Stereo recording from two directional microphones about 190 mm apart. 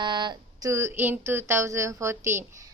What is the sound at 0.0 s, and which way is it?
A woman's voice, 25° right (ahead or behind).